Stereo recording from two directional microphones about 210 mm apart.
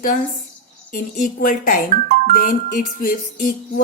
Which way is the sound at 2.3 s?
40° left (ahead or behind).